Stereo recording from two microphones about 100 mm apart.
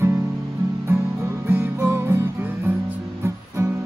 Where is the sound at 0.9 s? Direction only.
25° right (ahead or behind).